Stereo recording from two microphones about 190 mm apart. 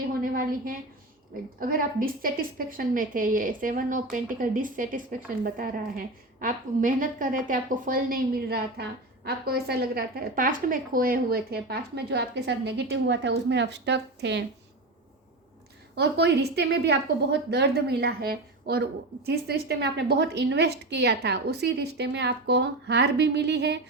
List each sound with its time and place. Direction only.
0.1 s a sound: 50° right (ahead or behind)
1.5 s a woman's voice: 45° right (ahead or behind); by 14.4 s 65° right (ahead or behind)
16.0 s a woman's voice: 60° right (ahead or behind)